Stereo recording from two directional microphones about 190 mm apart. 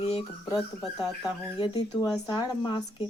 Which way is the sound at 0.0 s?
30° left (ahead or behind).